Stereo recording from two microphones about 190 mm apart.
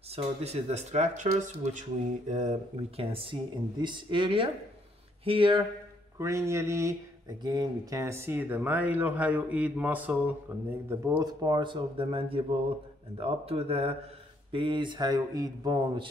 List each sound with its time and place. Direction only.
0.1 s speech: 35° right (ahead or behind)
6.1 s speech: 15° right (ahead or behind)